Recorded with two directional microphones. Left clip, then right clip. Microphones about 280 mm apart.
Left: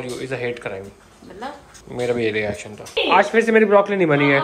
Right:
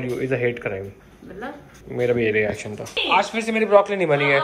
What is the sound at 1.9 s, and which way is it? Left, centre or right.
Speech, centre.